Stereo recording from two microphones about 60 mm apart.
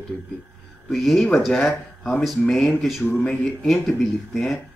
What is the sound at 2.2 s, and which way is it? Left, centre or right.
Speech, centre.